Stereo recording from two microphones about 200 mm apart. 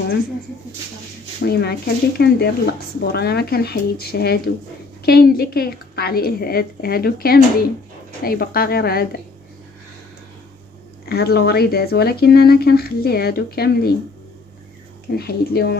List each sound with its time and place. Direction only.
1.4 s speech: 55° left (ahead or behind)
11.1 s speech: 50° left (ahead or behind)
15.1 s speech: 50° left (ahead or behind)